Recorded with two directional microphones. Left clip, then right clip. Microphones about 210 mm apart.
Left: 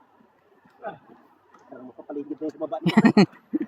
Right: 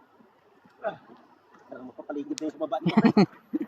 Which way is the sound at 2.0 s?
45° right (ahead or behind).